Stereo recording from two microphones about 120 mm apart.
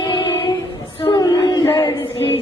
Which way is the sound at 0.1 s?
45° left (ahead or behind).